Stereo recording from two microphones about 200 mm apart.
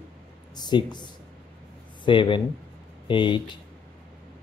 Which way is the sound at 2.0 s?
25° left (ahead or behind).